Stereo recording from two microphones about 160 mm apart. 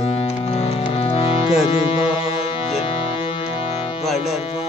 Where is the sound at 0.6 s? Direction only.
35° left (ahead or behind).